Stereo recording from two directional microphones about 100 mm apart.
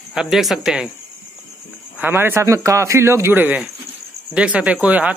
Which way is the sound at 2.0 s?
20° right (ahead or behind).